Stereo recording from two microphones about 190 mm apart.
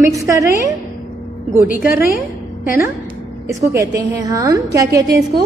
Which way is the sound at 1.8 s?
50° left (ahead or behind).